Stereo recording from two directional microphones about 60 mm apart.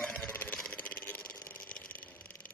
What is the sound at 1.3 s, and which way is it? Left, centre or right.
Vehicle, left.